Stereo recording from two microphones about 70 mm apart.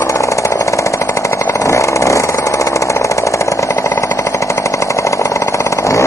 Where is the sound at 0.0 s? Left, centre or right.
Left.